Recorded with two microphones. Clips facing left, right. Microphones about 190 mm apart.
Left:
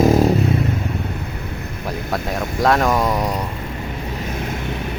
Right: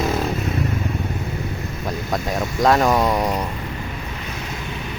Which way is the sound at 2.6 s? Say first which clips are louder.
Even; centre (ahead or behind).